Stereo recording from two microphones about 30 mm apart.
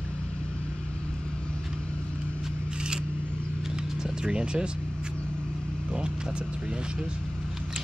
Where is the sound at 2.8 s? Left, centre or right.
Right.